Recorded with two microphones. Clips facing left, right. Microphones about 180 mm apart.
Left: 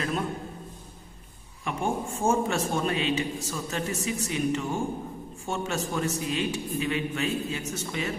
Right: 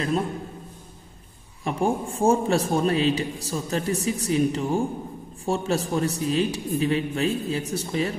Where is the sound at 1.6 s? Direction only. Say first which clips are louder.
Right 5 dB; 35° right (ahead or behind).